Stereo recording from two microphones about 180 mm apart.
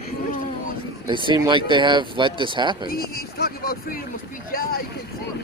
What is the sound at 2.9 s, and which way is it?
Speech, 60° left (ahead or behind).